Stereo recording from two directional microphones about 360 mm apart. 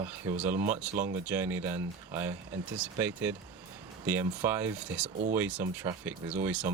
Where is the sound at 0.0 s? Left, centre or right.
Centre.